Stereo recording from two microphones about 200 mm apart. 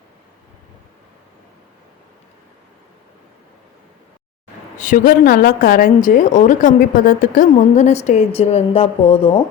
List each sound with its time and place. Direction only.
4.8 s a woman's voice: 40° left (ahead or behind)